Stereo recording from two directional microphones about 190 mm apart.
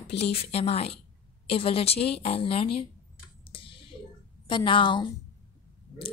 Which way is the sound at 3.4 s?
30° left (ahead or behind).